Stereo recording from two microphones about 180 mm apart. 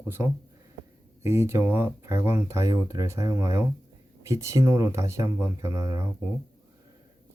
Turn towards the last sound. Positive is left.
turn(degrees=-20)  # may be behind; listen again after turning